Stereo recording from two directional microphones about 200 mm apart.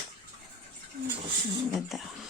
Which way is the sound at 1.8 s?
Centre (ahead or behind).